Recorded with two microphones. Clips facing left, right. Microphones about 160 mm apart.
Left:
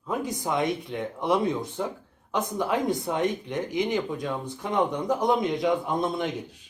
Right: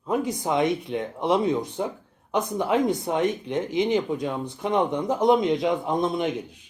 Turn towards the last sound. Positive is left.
turn(degrees=-20)  # may be behind; listen again after turning